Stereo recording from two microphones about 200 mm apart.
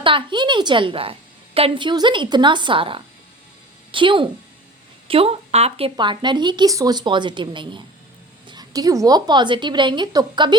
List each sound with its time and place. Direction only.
0.0 s a woman's voice: 25° right (ahead or behind)